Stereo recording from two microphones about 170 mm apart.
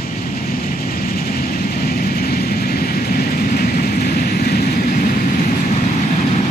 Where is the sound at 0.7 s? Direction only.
55° left (ahead or behind).